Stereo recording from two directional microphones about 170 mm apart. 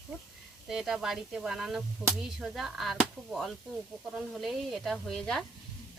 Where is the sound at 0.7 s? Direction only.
Centre (ahead or behind).